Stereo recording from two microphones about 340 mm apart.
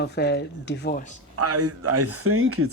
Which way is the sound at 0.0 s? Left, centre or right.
Left.